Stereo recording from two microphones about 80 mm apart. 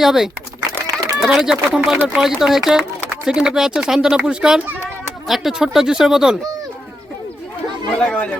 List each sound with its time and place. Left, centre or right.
0.0 s speech: centre
7.9 s speech: centre